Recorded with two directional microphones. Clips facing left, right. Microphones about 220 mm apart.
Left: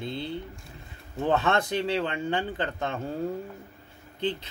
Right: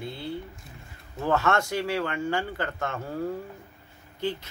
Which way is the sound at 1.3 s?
20° left (ahead or behind).